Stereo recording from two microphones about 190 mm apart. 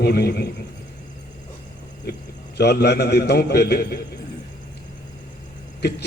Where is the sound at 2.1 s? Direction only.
55° left (ahead or behind).